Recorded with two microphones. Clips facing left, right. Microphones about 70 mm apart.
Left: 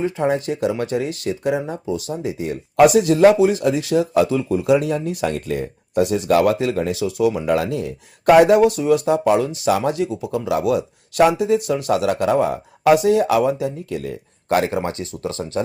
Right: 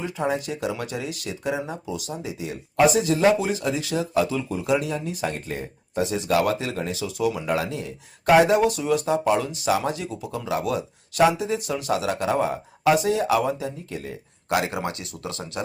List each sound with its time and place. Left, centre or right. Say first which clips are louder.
0.0 s speech: left 6 dB; left
2.7 s speech: left 6 dB; left
5.3 s speech: left 7 dB; left
14.5 s speech: left 5 dB; left